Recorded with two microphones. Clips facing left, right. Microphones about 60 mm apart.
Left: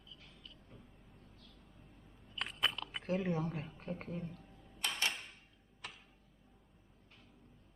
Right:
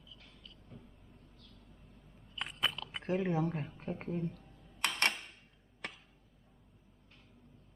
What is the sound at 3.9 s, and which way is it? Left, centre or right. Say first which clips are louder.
Speech: right 3 dB; right.